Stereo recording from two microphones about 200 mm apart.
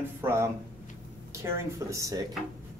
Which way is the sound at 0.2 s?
10° right (ahead or behind).